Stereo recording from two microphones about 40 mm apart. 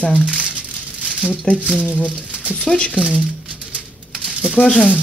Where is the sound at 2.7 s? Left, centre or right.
Centre.